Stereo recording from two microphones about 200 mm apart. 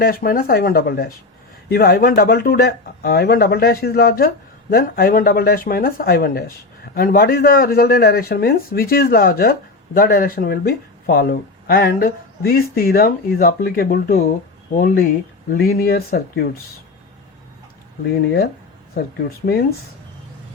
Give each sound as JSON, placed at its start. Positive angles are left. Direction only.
{"t": 0.0, "sound": "speech", "side_deg": 45}